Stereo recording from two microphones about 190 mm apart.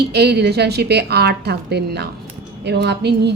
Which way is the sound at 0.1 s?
60° right (ahead or behind).